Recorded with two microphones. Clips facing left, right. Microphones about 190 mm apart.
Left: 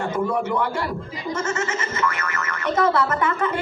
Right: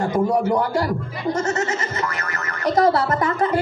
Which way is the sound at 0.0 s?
40° right (ahead or behind).